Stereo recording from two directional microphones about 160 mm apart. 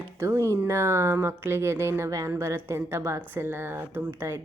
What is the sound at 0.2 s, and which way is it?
Speech, 20° right (ahead or behind).